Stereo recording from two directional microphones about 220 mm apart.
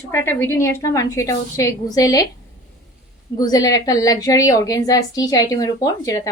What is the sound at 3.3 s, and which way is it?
A woman's voice, 15° left (ahead or behind).